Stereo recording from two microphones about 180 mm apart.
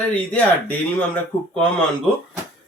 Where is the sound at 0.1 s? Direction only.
5° left (ahead or behind).